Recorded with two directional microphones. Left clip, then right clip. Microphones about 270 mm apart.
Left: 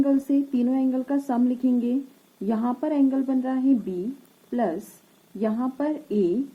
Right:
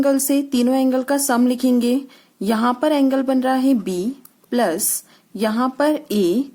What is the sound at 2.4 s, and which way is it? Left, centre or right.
A woman's voice, right.